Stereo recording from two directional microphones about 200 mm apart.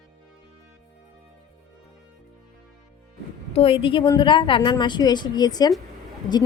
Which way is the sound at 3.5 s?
30° left (ahead or behind).